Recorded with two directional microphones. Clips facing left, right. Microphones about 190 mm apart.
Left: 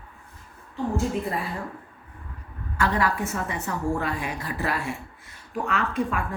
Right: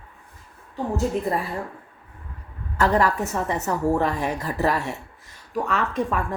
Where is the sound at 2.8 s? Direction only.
40° right (ahead or behind).